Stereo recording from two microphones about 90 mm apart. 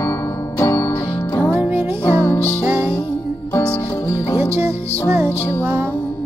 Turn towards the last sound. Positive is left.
turn(degrees=-25)  # may be behind; listen again after turning